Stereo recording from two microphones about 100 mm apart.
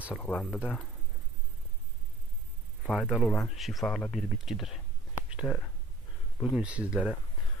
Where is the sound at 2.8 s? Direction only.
Centre (ahead or behind).